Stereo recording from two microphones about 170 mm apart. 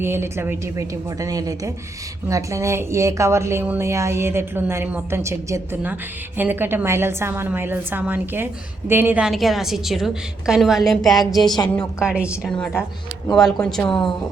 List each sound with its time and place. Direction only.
0.0 s a woman's voice: 15° right (ahead or behind)
11.4 s a woman's voice: 25° left (ahead or behind)
11.8 s a woman's voice: 5° right (ahead or behind)
12.5 s a woman's voice: 5° left (ahead or behind)